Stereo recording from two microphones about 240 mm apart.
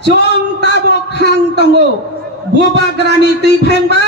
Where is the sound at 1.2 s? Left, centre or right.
Right.